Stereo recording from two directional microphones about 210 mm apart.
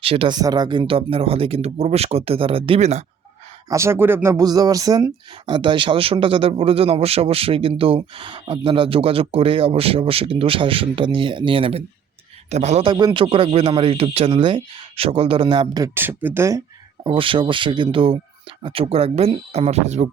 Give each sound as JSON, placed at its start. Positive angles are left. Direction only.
{"t": 0.0, "sound": "speech", "side_deg": -25}
{"t": 3.7, "sound": "speech", "side_deg": -15}